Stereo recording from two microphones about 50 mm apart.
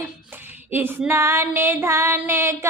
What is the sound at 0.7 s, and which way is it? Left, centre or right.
Music, right.